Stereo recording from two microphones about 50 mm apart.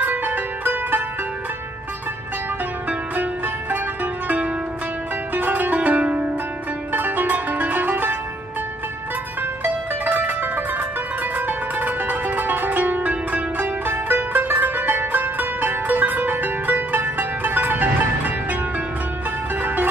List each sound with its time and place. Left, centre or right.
0.0 s music: right
3.7 s zither: right
5.8 s zither: right
6.9 s zither: right
9.6 s zither: right
19.6 s music: right